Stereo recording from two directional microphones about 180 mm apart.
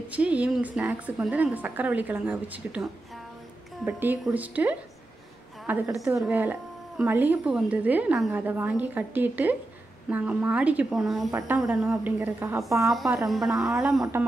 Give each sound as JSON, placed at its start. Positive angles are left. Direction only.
{"t": 0.1, "sound": "a woman's voice", "side_deg": -5}
{"t": 12.9, "sound": "speech", "side_deg": 0}